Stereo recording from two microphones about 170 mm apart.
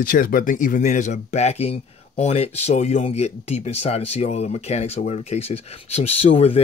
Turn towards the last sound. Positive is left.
turn(degrees=35)  # may be behind; listen again after turning